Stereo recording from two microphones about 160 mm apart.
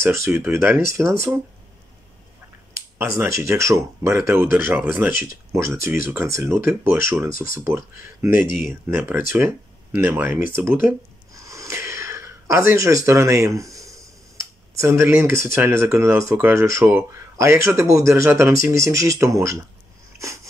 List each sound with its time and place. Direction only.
0.2 s speech: 15° right (ahead or behind)
3.2 s speech: 15° right (ahead or behind)
8.5 s speech: 55° left (ahead or behind)
8.8 s speech: 15° right (ahead or behind)
11.4 s a sound: 20° right (ahead or behind)
14.8 s speech: 15° right (ahead or behind)